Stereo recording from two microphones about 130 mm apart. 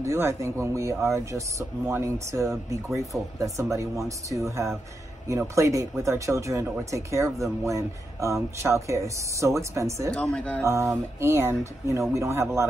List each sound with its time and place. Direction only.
0.0 s speech: 20° right (ahead or behind)
10.1 s a woman's voice: 10° left (ahead or behind)
10.6 s speech: 25° right (ahead or behind)